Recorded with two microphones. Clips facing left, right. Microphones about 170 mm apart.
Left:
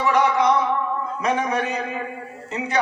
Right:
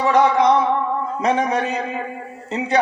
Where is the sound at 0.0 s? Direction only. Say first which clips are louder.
Right 3 dB; 30° right (ahead or behind).